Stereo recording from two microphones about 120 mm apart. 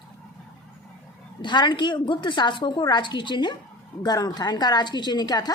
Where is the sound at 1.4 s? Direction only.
40° left (ahead or behind).